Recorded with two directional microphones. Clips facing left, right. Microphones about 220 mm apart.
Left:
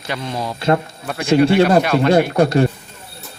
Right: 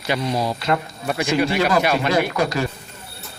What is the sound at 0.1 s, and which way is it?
Speech, 10° right (ahead or behind).